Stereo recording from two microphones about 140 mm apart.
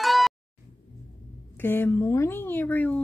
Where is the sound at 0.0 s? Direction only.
Centre (ahead or behind).